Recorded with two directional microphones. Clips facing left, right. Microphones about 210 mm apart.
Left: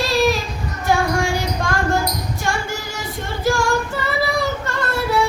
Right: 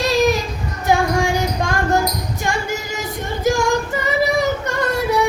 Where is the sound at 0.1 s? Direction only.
20° right (ahead or behind).